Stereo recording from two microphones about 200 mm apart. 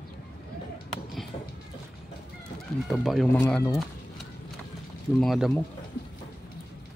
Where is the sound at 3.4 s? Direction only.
10° left (ahead or behind).